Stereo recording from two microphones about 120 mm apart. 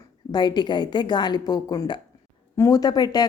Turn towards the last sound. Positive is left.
turn(degrees=35)  # may be behind; listen again after turning